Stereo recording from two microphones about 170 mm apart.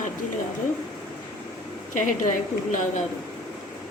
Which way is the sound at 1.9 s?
50° left (ahead or behind).